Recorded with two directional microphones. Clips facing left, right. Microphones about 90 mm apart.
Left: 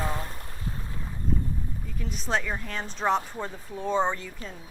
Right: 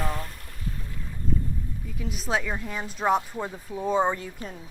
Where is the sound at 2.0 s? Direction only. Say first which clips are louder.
Right 1 dB; 5° right (ahead or behind).